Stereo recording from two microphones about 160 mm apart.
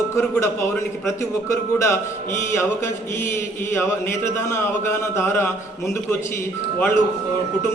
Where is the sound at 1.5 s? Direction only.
20° left (ahead or behind).